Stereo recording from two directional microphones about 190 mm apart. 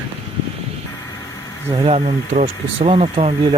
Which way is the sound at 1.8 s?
30° right (ahead or behind).